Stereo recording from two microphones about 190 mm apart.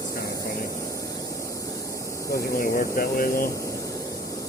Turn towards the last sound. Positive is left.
turn(degrees=50)  # may be behind; listen again after turning